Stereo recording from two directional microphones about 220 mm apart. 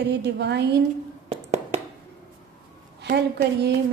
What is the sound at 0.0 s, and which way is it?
Speech, 50° right (ahead or behind).